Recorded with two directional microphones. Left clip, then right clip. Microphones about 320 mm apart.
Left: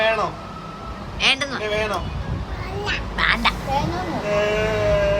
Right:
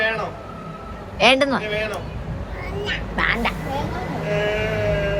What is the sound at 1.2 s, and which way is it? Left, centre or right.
Speech, centre.